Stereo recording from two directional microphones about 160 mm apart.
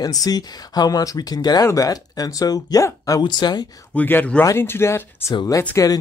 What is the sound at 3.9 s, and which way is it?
Speech, 10° left (ahead or behind).